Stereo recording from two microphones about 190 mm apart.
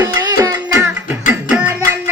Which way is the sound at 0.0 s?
20° right (ahead or behind).